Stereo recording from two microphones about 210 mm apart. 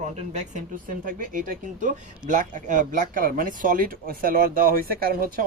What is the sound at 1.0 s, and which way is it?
Speech, 40° right (ahead or behind).